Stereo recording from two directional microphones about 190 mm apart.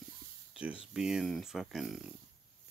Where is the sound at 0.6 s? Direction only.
5° right (ahead or behind).